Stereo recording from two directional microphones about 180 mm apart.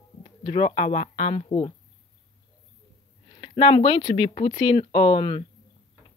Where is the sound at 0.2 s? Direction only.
35° left (ahead or behind).